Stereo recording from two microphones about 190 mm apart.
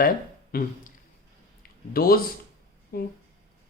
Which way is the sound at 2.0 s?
50° left (ahead or behind).